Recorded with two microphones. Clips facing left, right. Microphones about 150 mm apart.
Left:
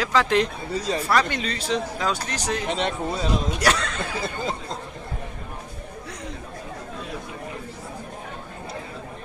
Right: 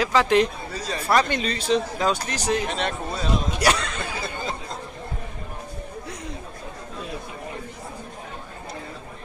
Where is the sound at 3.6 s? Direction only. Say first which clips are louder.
Right 1 dB; 10° right (ahead or behind).